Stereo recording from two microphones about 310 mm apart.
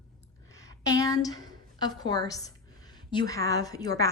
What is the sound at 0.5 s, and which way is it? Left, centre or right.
A woman's voice, centre.